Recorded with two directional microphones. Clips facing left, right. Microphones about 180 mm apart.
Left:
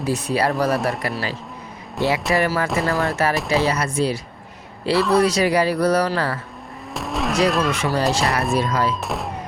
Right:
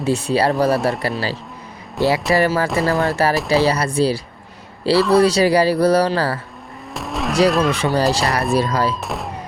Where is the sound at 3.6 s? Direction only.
35° right (ahead or behind).